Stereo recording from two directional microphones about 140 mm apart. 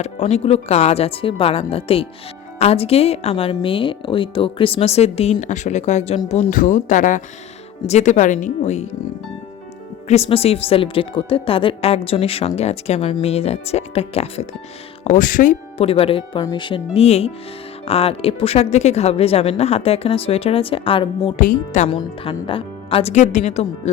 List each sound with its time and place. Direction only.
0.0 s speech: 50° left (ahead or behind)
6.5 s speech: 70° left (ahead or behind); by 8.9 s 55° left (ahead or behind)
10.1 s speech: 45° left (ahead or behind)
15.0 s speech: 65° left (ahead or behind)
15.8 s speech: 45° left (ahead or behind)
16.4 s speech: 30° left (ahead or behind)
21.3 s speech: 70° left (ahead or behind)
21.8 s speech: 40° left (ahead or behind)